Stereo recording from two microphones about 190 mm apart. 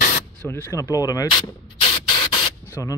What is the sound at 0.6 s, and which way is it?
Speech, 20° left (ahead or behind).